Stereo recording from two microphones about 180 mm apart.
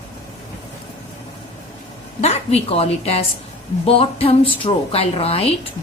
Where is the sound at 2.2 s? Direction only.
35° left (ahead or behind).